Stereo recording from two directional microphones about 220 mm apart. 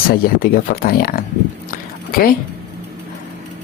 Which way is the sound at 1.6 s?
40° left (ahead or behind).